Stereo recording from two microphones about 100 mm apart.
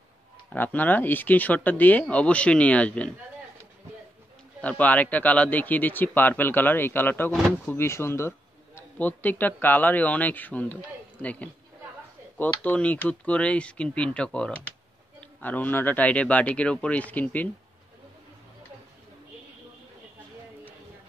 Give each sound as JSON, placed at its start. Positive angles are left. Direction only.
{"t": 0.5, "sound": "a man's voice", "side_deg": 15}
{"t": 4.6, "sound": "a man's voice", "side_deg": 15}